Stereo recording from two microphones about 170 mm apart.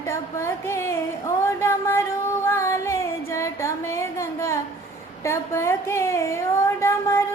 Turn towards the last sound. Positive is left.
turn(degrees=15)  # may be behind; listen again after turning